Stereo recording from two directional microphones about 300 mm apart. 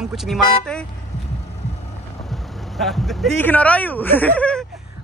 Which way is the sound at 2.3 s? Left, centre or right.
Centre.